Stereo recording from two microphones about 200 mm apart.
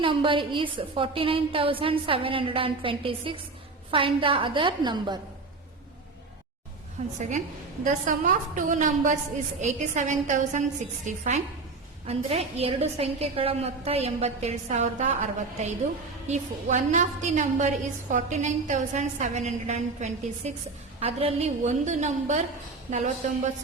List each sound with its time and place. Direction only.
0.0 s a woman's voice: 25° right (ahead or behind)
7.2 s a woman's voice: 35° right (ahead or behind)